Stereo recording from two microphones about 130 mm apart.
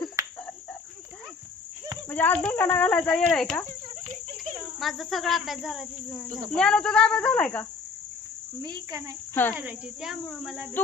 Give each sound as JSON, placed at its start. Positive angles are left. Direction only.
{"t": 0.2, "sound": "cricket", "side_deg": -20}
{"t": 2.0, "sound": "speech", "side_deg": 15}
{"t": 4.8, "sound": "cricket", "side_deg": 0}
{"t": 6.5, "sound": "speech", "side_deg": 5}
{"t": 8.6, "sound": "speech", "side_deg": -30}
{"t": 9.3, "sound": "speech", "side_deg": 15}
{"t": 9.6, "sound": "cricket", "side_deg": -10}